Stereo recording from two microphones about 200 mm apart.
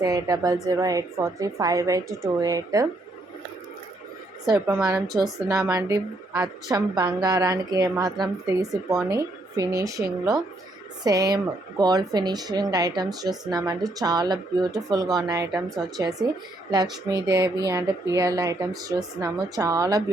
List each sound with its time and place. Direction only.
0.0 s a woman's voice: 15° right (ahead or behind)
4.4 s a woman's voice: 15° right (ahead or behind)